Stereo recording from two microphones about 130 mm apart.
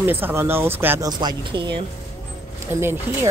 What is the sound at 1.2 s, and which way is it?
Speech, 35° right (ahead or behind).